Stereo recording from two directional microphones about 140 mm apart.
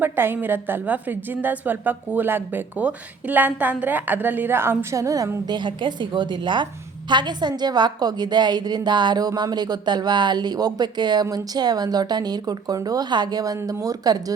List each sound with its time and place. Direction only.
0.0 s a woman's voice: 15° right (ahead or behind)